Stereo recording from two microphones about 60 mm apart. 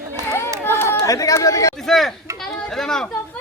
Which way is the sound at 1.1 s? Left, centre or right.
Left.